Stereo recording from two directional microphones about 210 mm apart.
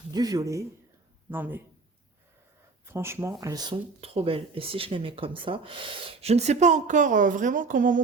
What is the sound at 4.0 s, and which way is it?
Speech, 30° right (ahead or behind).